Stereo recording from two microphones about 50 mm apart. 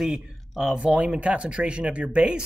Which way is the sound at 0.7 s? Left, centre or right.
Right.